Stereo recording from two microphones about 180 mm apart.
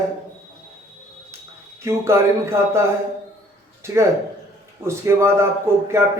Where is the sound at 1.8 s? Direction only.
15° right (ahead or behind).